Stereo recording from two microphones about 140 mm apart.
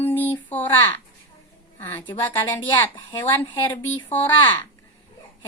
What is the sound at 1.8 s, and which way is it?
A woman's voice, 15° left (ahead or behind).